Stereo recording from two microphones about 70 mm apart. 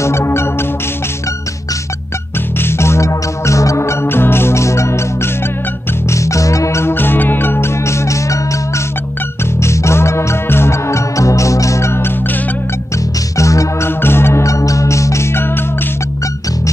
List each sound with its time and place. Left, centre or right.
0.0 s music: left
2.6 s music: left
13.4 s music: left
13.8 s music: left
15.3 s music: left